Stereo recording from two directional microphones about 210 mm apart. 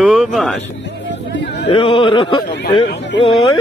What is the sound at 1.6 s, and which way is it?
Speech, 25° left (ahead or behind).